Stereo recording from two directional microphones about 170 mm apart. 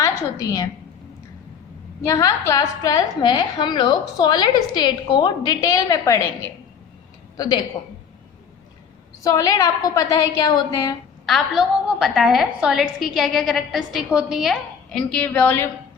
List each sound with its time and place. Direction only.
0.0 s a woman's voice: 20° left (ahead or behind)
2.0 s a woman's voice: 20° left (ahead or behind)
7.8 s a woman's voice: 25° left (ahead or behind)
9.2 s a woman's voice: 20° left (ahead or behind)
11.3 s a woman's voice: centre (ahead or behind)